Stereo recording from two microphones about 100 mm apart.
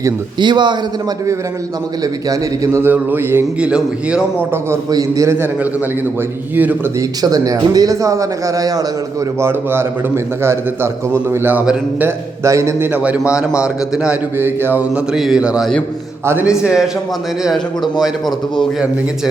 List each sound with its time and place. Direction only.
0.3 s a man's voice: 50° right (ahead or behind)
2.3 s a man's voice: 30° right (ahead or behind)
3.6 s a man's voice: 10° right (ahead or behind)
4.9 s speech: 35° right (ahead or behind)
6.6 s a man's voice: 15° right (ahead or behind)
7.2 s speech: 40° right (ahead or behind)
9.4 s a man's voice: 25° right (ahead or behind)
14.3 s a man's voice: 20° right (ahead or behind)
16.6 s a man's voice: 5° right (ahead or behind)
18.0 s a man's voice: centre (ahead or behind)